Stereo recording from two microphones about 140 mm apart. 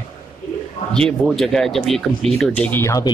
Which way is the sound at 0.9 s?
5° left (ahead or behind).